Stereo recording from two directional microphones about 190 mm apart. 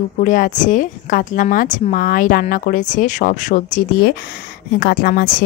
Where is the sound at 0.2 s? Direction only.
45° left (ahead or behind).